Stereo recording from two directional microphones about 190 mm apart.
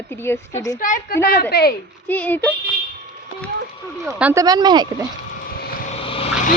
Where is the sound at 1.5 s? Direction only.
55° left (ahead or behind).